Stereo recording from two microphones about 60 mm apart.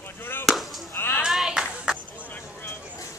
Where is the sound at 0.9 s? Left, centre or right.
Left.